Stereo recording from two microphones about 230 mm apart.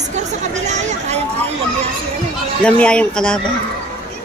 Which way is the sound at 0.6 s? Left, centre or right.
Right.